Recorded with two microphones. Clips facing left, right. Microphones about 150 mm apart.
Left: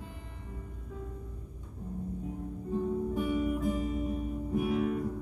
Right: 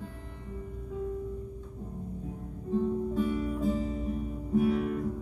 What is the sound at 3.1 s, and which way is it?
Music, 15° left (ahead or behind).